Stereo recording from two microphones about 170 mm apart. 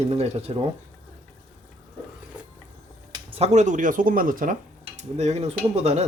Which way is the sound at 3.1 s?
35° right (ahead or behind).